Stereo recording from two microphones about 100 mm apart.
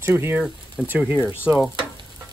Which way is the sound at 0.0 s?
25° right (ahead or behind).